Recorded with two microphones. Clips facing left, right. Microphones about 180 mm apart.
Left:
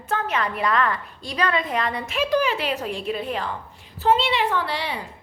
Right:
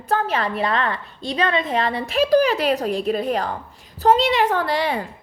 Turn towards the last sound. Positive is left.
turn(degrees=-45)  # may be behind; listen again after turning